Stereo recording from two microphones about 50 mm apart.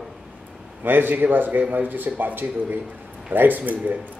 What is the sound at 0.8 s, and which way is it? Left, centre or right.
A man's voice, right.